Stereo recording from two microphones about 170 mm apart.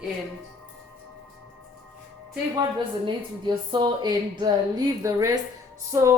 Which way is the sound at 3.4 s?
25° right (ahead or behind).